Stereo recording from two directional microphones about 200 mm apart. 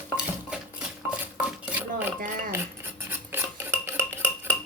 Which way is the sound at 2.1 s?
45° right (ahead or behind).